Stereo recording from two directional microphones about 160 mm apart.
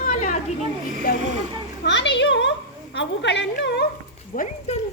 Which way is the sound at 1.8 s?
90° left.